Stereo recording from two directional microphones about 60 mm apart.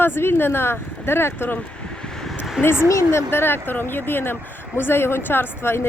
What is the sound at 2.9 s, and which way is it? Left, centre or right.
Speech, left.